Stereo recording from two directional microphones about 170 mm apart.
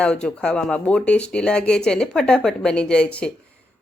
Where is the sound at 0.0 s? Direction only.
5° left (ahead or behind).